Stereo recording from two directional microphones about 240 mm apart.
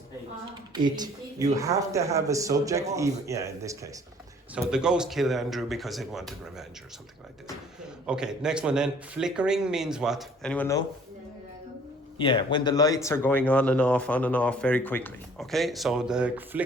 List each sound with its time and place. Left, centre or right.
0.7 s a man's voice: centre
8.0 s a man's voice: centre
12.1 s speech: left; by 16.6 s centre